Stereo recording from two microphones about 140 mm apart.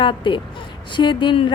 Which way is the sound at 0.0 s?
35° left (ahead or behind).